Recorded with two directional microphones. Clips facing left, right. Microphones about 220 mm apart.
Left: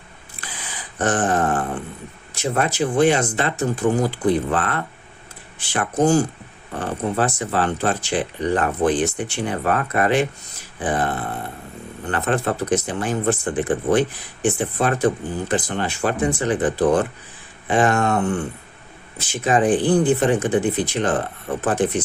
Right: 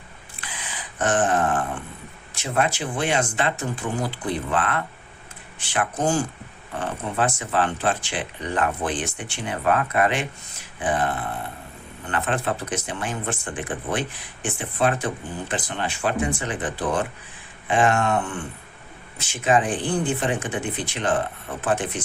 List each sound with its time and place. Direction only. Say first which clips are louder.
0.9 s speech: left 2 dB; 35° left (ahead or behind)